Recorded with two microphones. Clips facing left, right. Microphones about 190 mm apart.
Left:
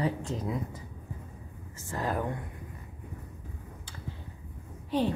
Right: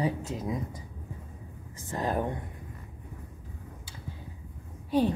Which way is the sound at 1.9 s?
20° right (ahead or behind).